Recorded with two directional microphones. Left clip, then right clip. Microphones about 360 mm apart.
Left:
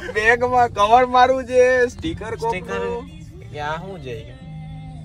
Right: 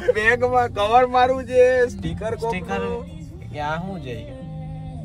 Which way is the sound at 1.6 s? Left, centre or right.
Centre.